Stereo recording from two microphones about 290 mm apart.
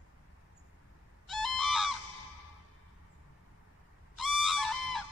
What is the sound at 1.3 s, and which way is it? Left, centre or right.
Goose, centre.